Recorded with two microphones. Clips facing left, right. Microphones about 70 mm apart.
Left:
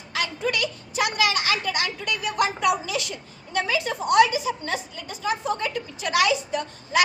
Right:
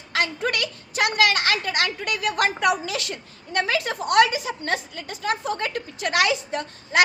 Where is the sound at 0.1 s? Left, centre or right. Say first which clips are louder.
Right 2 dB; right.